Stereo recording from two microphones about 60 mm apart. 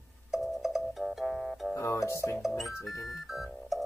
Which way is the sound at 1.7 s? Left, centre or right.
Left.